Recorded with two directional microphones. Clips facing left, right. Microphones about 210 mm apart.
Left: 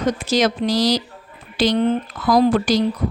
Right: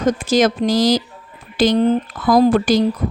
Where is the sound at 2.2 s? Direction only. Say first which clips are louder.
Right 2 dB; 50° right (ahead or behind).